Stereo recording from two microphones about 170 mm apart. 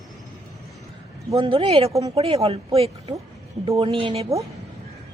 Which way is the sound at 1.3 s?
30° right (ahead or behind).